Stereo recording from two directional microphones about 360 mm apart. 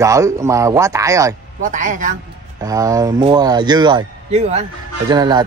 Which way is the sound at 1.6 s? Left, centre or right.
Right.